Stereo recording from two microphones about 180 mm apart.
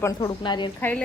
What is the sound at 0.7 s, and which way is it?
Speech, 10° left (ahead or behind).